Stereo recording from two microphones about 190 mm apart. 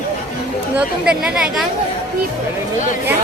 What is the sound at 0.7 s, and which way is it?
Speech, 5° right (ahead or behind).